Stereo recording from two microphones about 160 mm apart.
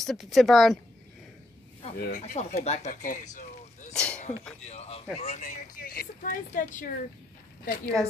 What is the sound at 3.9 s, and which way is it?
Speech, 5° left (ahead or behind).